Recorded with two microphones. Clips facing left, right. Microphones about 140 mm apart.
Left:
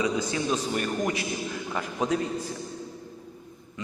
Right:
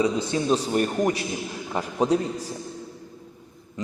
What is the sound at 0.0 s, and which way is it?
A man's voice, 30° right (ahead or behind).